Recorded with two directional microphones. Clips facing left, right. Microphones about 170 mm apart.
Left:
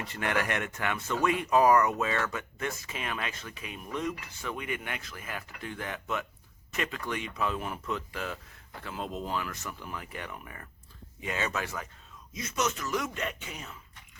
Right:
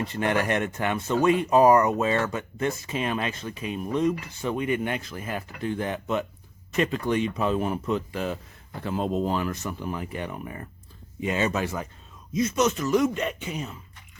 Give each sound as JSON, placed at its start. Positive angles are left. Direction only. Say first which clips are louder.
{"t": 0.0, "sound": "speech", "louder": "right 6 dB", "side_deg": -25}